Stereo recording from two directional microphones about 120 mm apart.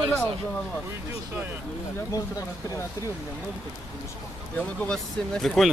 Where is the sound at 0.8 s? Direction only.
15° right (ahead or behind).